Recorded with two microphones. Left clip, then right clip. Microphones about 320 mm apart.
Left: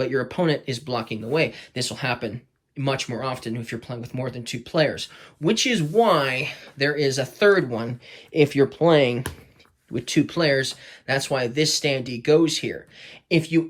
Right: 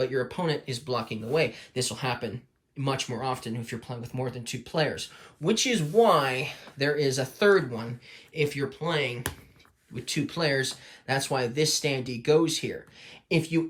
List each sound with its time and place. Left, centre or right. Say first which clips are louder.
0.0 s speech: left 5 dB; centre